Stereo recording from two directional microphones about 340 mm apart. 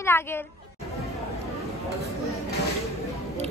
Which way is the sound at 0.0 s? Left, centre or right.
Centre.